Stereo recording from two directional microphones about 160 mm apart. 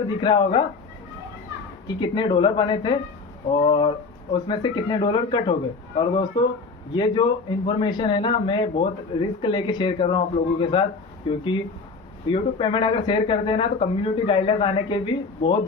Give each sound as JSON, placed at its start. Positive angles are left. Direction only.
{"t": 0.2, "sound": "speech", "side_deg": 30}
{"t": 2.0, "sound": "speech", "side_deg": 30}